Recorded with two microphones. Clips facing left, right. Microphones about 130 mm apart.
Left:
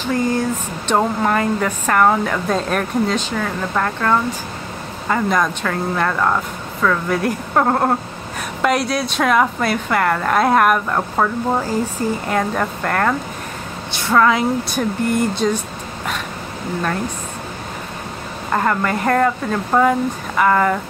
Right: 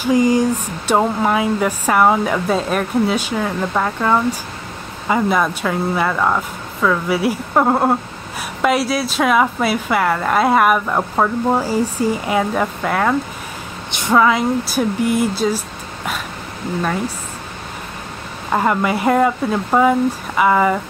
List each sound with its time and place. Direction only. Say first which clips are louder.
0.0 s speech: right 5 dB; 15° right (ahead or behind)
13.9 s speech: right 1 dB; 15° right (ahead or behind)
14.2 s speech: even; 5° right (ahead or behind)
18.5 s speech: right 2 dB; 10° right (ahead or behind)